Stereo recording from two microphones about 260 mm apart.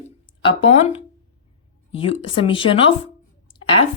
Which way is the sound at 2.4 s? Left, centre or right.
Centre.